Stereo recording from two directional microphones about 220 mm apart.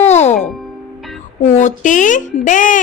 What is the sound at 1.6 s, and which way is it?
A woman's voice, 35° left (ahead or behind).